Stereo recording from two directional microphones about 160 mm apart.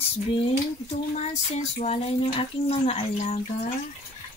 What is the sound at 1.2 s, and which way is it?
Speech, 40° left (ahead or behind).